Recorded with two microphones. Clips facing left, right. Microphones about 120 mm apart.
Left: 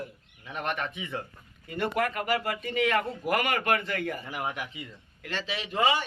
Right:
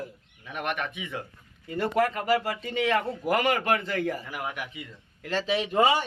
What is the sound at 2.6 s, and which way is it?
Speech, 25° right (ahead or behind).